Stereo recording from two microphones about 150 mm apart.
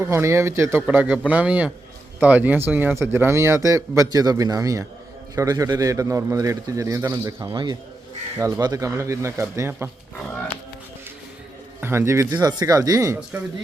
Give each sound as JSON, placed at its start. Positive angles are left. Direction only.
{"t": 0.0, "sound": "speech", "side_deg": -20}
{"t": 7.5, "sound": "a man's voice", "side_deg": -30}
{"t": 11.8, "sound": "speech", "side_deg": -15}